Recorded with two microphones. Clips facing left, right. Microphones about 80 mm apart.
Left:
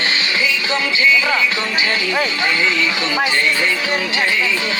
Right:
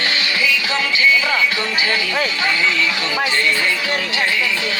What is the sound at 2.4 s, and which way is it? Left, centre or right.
Speech, left.